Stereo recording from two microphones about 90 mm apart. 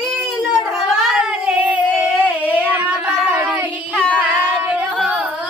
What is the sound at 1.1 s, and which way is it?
Child singing, 10° right (ahead or behind).